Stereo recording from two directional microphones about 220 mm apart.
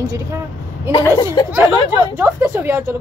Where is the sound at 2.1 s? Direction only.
10° right (ahead or behind).